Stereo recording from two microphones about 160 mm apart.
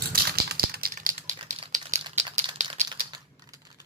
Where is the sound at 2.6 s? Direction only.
50° right (ahead or behind).